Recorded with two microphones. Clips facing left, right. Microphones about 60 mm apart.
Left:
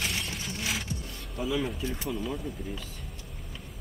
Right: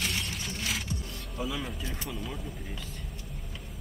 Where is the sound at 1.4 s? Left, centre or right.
Centre.